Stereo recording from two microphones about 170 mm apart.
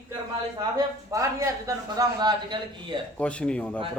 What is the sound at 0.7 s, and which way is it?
A man's voice, 20° right (ahead or behind).